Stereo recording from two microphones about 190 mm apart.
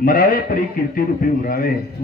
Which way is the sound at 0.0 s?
45° left (ahead or behind).